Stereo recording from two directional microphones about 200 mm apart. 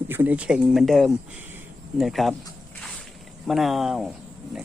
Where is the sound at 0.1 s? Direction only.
10° right (ahead or behind).